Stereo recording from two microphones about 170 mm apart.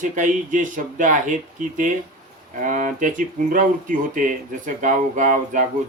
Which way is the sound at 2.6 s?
50° right (ahead or behind).